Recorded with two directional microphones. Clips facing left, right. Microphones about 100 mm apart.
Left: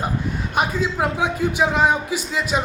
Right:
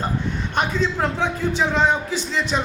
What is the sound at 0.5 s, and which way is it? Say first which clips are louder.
A man's voice: even; 10° left (ahead or behind).